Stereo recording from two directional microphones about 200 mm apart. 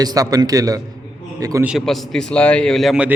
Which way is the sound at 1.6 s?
Centre (ahead or behind).